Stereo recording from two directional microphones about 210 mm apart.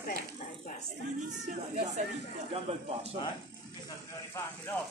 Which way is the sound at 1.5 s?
35° right (ahead or behind).